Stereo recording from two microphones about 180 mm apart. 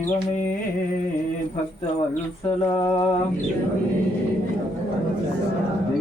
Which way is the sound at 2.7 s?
25° left (ahead or behind).